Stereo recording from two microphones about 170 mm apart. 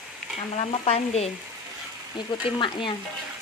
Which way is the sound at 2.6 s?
30° left (ahead or behind).